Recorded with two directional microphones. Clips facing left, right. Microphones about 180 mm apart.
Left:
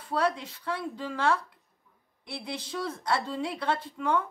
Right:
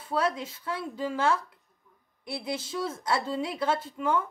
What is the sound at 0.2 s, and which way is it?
A woman's voice, 5° right (ahead or behind).